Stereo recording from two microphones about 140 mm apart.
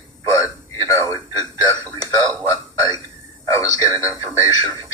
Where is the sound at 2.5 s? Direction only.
25° left (ahead or behind).